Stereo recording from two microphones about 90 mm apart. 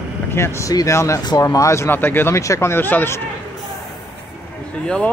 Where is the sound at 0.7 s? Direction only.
40° left (ahead or behind).